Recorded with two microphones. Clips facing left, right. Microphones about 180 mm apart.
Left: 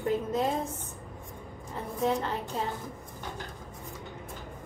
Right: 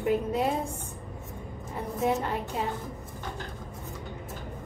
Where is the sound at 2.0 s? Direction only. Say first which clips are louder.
Right 1 dB; 15° right (ahead or behind).